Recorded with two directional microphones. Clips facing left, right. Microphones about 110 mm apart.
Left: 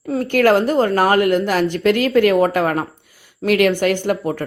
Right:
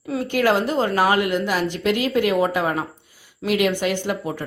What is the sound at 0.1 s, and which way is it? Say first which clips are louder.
A woman's voice: left 5 dB; 50° left (ahead or behind).